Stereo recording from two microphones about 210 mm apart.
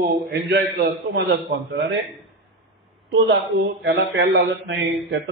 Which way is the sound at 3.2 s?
55° right (ahead or behind).